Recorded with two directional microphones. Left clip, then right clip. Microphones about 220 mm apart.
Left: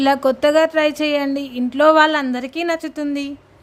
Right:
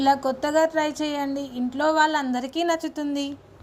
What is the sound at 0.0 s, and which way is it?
Speech, 30° left (ahead or behind).